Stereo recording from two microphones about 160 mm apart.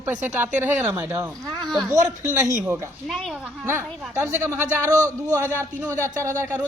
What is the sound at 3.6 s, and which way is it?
Speech, 15° right (ahead or behind).